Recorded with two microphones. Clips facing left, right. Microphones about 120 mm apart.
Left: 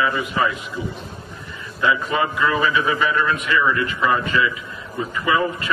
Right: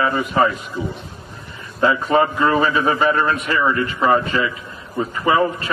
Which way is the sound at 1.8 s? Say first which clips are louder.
Right 4 dB; 40° right (ahead or behind).